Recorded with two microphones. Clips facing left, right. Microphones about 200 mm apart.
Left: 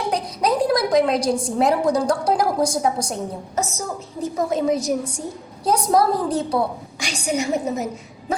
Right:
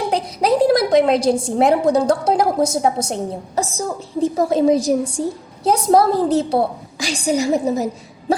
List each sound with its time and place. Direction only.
0.1 s a woman's voice: 25° right (ahead or behind)